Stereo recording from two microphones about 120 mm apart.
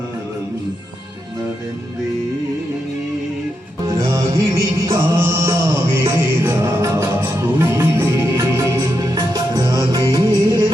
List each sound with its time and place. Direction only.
3.8 s music: 30° right (ahead or behind)